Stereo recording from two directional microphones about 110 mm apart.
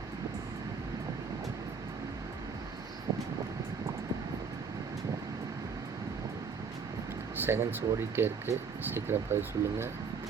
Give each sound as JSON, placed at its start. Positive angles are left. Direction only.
{"t": 3.1, "sound": "vehicle", "side_deg": -35}
{"t": 7.4, "sound": "speech", "side_deg": -20}